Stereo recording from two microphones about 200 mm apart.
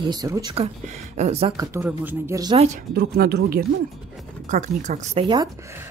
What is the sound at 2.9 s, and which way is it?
Speech, 50° right (ahead or behind).